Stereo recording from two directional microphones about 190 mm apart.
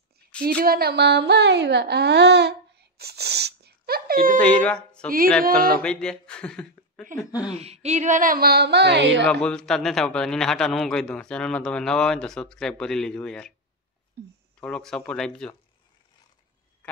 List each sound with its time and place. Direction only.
0.6 s speech: 55° right (ahead or behind)
3.0 s a sound: 60° right (ahead or behind)
4.4 s a man's voice: 5° left (ahead or behind)
7.2 s speech: 20° left (ahead or behind)
7.5 s speech: 35° right (ahead or behind); by 9.2 s 65° right (ahead or behind)
9.2 s a man's voice: 5° left (ahead or behind)
14.6 s a man's voice: 5° left (ahead or behind)